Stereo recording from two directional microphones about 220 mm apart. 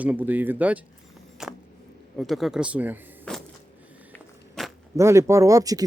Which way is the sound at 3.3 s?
5° left (ahead or behind).